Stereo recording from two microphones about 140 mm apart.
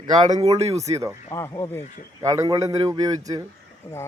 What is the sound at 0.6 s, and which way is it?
Speech, 50° right (ahead or behind).